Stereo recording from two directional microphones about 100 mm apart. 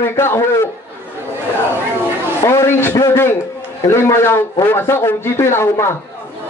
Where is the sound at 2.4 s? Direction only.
30° left (ahead or behind).